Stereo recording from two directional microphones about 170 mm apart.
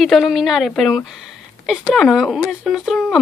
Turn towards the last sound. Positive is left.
turn(degrees=0)  # may be behind; listen again after turning